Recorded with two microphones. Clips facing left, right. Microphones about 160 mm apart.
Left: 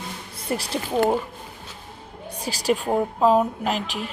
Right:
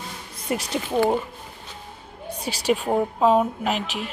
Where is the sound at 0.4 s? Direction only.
35° left (ahead or behind).